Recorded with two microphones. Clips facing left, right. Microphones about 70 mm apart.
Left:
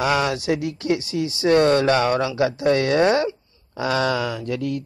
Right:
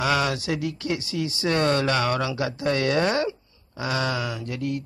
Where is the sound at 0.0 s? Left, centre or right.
Left.